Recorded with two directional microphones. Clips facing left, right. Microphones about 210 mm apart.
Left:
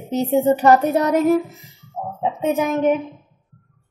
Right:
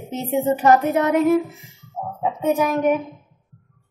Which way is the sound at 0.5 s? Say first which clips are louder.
Left 1 dB; 35° left (ahead or behind).